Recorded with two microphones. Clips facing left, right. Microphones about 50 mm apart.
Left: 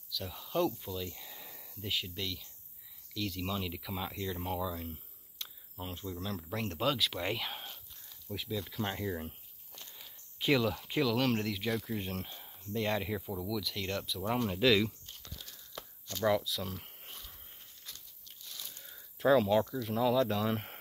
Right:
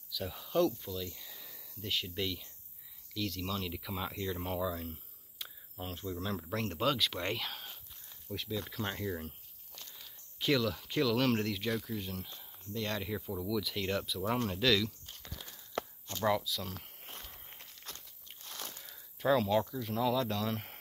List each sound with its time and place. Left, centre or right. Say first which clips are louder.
0.1 s speech: right 2 dB; centre
0.7 s a sound: even; centre
1.9 s speech: even; centre
2.1 s speech: right 3 dB; centre
3.2 s speech: left 1 dB; centre
12.0 s speech: left 3 dB; left
12.7 s speech: left 3 dB; centre
14.4 s speech: left 3 dB; centre
15.2 s a sound: right 3 dB; centre
16.3 s speech: left 1 dB; centre
17.8 s walk: right 3 dB; right
18.9 s a sound: left 3 dB; centre
19.8 s speech: left 3 dB; centre